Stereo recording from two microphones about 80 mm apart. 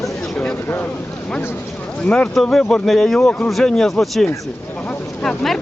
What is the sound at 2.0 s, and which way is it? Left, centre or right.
Speech, centre.